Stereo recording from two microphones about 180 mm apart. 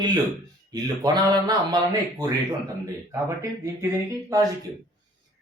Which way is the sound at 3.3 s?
15° right (ahead or behind).